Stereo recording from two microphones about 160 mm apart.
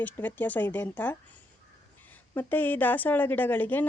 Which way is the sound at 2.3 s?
10° left (ahead or behind).